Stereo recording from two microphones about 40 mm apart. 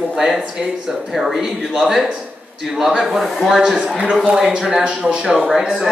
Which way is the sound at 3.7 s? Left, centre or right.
Right.